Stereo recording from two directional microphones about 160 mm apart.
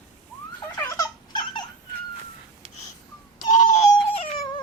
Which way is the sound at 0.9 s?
25° left (ahead or behind).